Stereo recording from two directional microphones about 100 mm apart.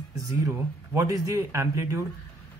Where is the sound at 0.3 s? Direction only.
30° right (ahead or behind).